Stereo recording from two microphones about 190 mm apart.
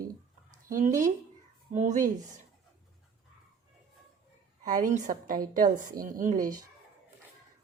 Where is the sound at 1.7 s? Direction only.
40° right (ahead or behind).